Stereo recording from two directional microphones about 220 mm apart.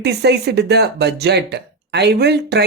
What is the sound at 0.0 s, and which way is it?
Speech, 50° right (ahead or behind).